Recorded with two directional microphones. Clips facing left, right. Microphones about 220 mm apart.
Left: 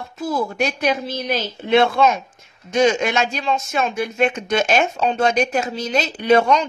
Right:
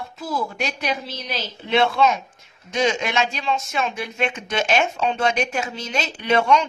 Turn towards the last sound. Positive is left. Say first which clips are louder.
# left 4 dB
turn(degrees=40)  # may be behind; listen again after turning